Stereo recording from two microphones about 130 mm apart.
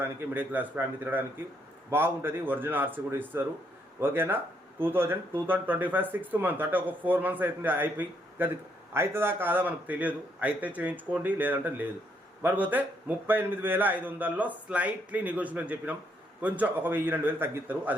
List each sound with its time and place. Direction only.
0.0 s speech: 15° right (ahead or behind)